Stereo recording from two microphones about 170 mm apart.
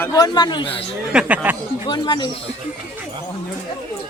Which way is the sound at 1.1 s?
5° right (ahead or behind).